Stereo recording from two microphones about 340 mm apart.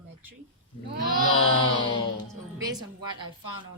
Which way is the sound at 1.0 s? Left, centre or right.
Right.